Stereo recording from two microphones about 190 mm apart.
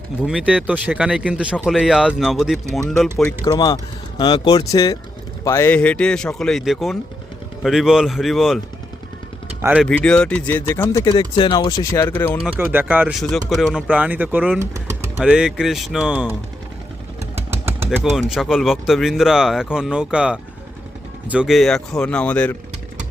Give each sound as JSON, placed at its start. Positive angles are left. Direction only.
{"t": 0.3, "sound": "speech", "side_deg": -5}
{"t": 3.4, "sound": "speech", "side_deg": 20}
{"t": 9.8, "sound": "speech", "side_deg": 5}
{"t": 11.2, "sound": "speech", "side_deg": 25}
{"t": 12.4, "sound": "speech", "side_deg": -5}
{"t": 15.2, "sound": "speech", "side_deg": -5}
{"t": 18.0, "sound": "speech", "side_deg": 0}